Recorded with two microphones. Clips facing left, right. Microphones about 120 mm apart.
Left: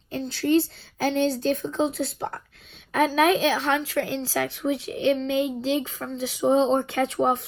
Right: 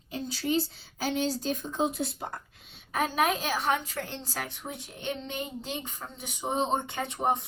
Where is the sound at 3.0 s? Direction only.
90° left.